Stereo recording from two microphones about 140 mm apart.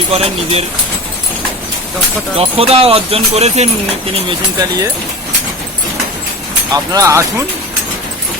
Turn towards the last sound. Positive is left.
turn(degrees=-20)  # may be behind; listen again after turning